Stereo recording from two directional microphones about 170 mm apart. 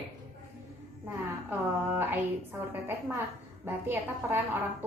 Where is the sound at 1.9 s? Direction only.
10° right (ahead or behind).